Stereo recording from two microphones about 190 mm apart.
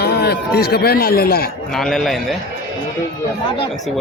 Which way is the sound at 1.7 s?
Centre (ahead or behind).